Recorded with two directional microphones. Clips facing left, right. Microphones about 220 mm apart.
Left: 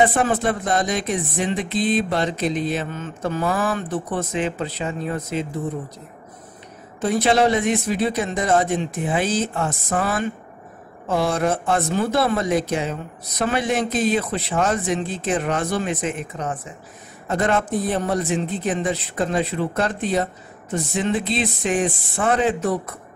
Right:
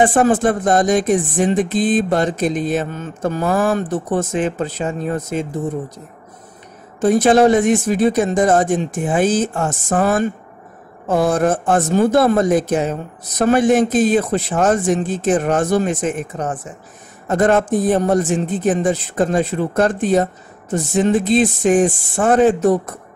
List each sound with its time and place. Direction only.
0.0 s speech: 45° right (ahead or behind)
7.0 s speech: 45° right (ahead or behind)